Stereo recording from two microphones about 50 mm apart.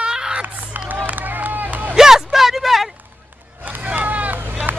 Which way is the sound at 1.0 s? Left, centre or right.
Right.